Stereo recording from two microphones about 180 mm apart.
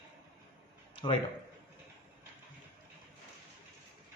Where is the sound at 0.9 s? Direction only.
30° left (ahead or behind).